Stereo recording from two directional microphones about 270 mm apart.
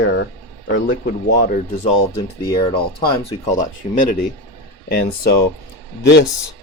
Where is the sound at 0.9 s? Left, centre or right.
Left.